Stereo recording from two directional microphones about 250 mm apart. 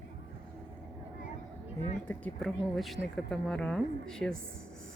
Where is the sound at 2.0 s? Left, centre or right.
Centre.